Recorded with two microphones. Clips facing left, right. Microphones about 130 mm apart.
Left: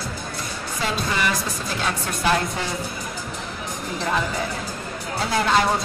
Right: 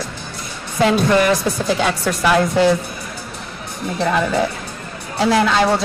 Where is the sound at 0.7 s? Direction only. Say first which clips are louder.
Right 11 dB; 65° right (ahead or behind); by 2.7 s 85° right.